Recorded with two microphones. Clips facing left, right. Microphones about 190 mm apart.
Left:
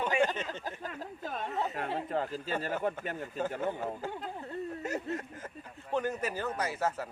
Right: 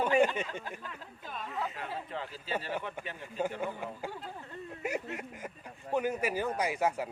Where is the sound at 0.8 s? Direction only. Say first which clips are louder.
Left 6 dB; 45° left (ahead or behind).